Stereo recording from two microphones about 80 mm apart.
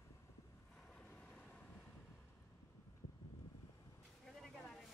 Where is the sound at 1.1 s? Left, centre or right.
Left.